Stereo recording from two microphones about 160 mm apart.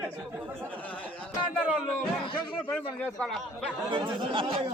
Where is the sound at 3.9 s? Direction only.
35° right (ahead or behind).